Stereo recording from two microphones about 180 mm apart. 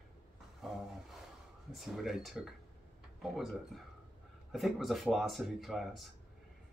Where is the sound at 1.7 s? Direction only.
Centre (ahead or behind).